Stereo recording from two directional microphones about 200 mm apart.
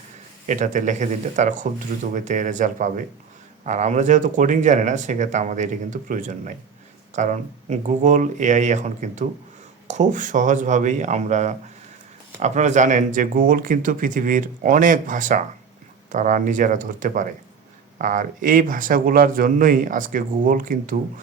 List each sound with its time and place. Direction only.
0.4 s speech: 40° right (ahead or behind)